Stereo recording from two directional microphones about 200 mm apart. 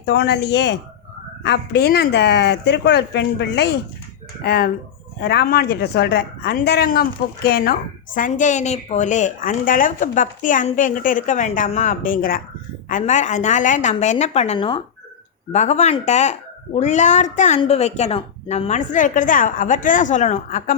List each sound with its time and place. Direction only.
0.0 s a woman's voice: 55° left (ahead or behind); by 20.7 s 40° left (ahead or behind)